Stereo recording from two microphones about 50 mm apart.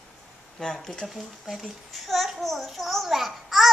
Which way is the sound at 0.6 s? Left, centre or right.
Centre.